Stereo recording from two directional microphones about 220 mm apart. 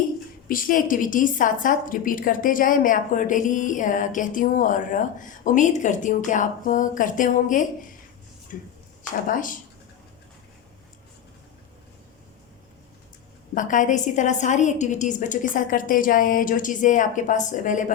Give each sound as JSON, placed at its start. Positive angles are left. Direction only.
{"t": 0.4, "sound": "a woman's voice", "side_deg": 40}
{"t": 13.5, "sound": "a woman's voice", "side_deg": 35}